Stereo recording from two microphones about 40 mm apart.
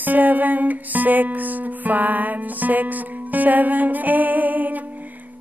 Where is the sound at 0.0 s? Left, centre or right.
Right.